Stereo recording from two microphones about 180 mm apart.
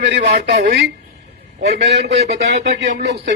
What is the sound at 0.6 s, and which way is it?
Speech, 70° right (ahead or behind).